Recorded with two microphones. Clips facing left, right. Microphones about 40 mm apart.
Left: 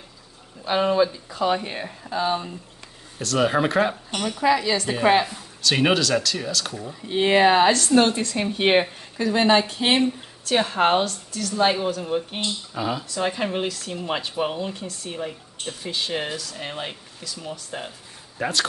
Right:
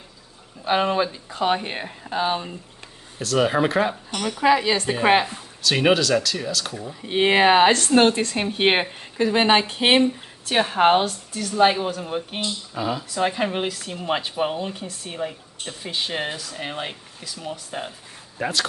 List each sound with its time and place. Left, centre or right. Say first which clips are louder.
0.7 s speech: left 1 dB; right
3.2 s speech: right 1 dB; centre
4.2 s speech: right 2 dB; right
5.6 s speech: right 1 dB; centre
7.1 s speech: right 1 dB; right
10.4 s a woman's voice: right 2 dB; right
12.7 s speech: right 1 dB; centre
13.1 s a woman's voice: right 4 dB; centre
15.6 s speech: left 1 dB; right
16.1 s a woman's voice: even; centre
16.6 s a woman's voice: right 3 dB; centre
17.2 s speech: right 1 dB; centre
17.6 s a woman's voice: right 2 dB; centre